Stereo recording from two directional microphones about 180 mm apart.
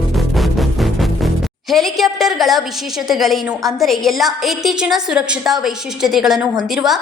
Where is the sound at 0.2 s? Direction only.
Centre (ahead or behind).